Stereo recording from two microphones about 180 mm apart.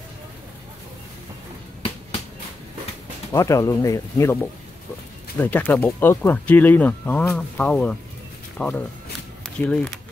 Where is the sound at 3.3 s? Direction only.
15° left (ahead or behind).